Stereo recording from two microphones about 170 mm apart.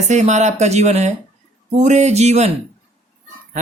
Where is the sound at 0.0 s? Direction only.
40° right (ahead or behind).